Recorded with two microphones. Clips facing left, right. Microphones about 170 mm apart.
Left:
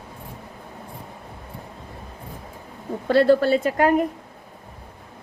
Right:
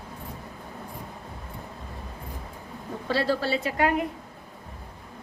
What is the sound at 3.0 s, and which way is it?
A woman's voice, 55° left (ahead or behind).